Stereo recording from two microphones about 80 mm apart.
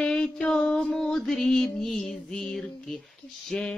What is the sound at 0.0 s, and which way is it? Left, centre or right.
Music, centre.